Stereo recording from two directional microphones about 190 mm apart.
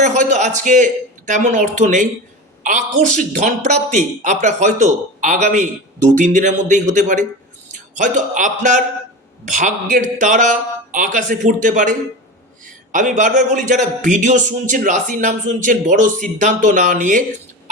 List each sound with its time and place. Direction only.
0.0 s a man's voice: 40° right (ahead or behind)